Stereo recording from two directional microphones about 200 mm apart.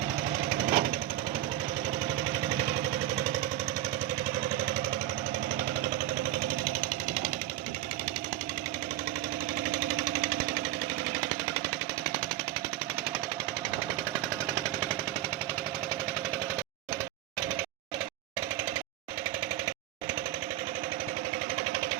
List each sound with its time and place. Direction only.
0.7 s jackhammer: 40° right (ahead or behind)
9.8 s jackhammer: 40° right (ahead or behind)